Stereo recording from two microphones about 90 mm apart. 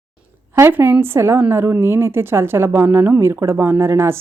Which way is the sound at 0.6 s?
25° right (ahead or behind).